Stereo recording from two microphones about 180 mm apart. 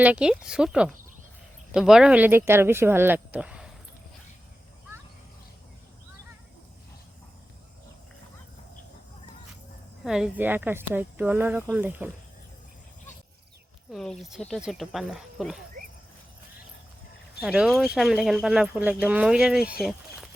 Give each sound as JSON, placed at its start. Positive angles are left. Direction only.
{"t": 0.0, "sound": "speech", "side_deg": -5}
{"t": 10.0, "sound": "speech", "side_deg": -5}
{"t": 13.9, "sound": "speech", "side_deg": 0}
{"t": 17.4, "sound": "speech", "side_deg": -5}